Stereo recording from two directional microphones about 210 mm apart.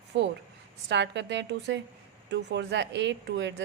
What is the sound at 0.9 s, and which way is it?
Speech, 55° right (ahead or behind).